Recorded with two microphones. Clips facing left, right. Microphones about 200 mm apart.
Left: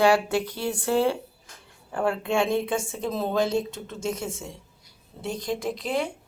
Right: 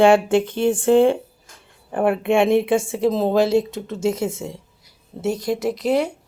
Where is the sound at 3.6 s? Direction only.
90° right.